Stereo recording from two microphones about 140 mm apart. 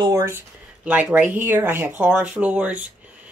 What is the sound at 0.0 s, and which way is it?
Speech, 25° right (ahead or behind).